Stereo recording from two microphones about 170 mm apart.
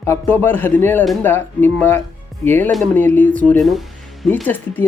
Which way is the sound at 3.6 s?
Centre (ahead or behind).